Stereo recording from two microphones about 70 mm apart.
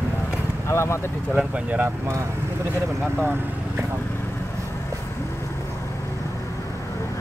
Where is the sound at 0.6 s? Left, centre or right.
Left.